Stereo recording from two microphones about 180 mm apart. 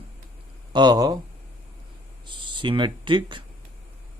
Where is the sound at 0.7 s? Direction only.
20° right (ahead or behind).